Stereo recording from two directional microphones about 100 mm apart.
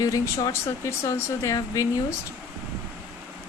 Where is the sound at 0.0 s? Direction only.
35° left (ahead or behind).